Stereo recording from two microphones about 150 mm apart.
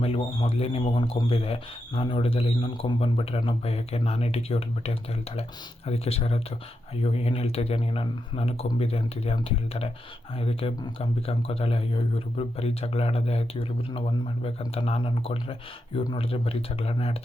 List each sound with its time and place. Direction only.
0.0 s speech: 40° left (ahead or behind)